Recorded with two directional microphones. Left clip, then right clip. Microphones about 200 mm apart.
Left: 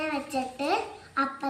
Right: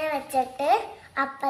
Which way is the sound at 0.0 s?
35° right (ahead or behind).